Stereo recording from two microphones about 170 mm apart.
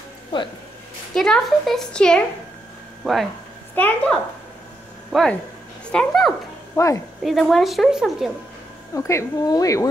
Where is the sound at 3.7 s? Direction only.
10° left (ahead or behind).